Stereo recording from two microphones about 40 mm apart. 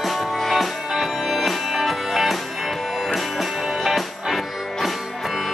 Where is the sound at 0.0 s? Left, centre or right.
Centre.